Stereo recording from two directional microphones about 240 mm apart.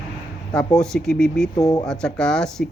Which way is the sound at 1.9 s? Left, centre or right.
Centre.